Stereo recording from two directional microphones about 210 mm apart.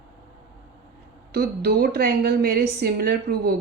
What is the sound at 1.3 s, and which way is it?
A woman's voice, 45° right (ahead or behind).